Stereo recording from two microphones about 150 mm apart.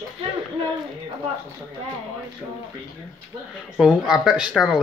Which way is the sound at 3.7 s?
5° right (ahead or behind).